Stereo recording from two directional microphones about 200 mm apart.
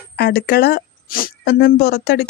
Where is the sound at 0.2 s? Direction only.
55° left (ahead or behind).